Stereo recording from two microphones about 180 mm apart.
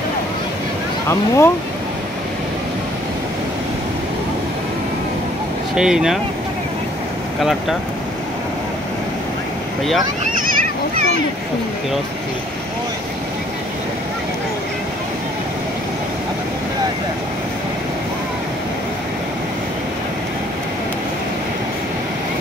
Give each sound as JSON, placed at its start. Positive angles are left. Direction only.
{"t": 1.0, "sound": "speech", "side_deg": 15}
{"t": 5.8, "sound": "speech", "side_deg": -5}